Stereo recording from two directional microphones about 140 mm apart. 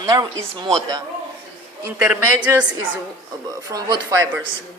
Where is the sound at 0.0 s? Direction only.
25° right (ahead or behind).